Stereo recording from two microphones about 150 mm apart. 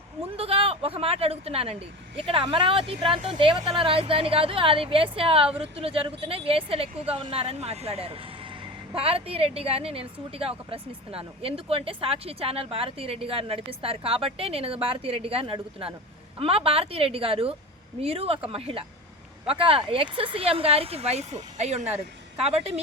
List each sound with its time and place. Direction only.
0.3 s speech: 40° right (ahead or behind)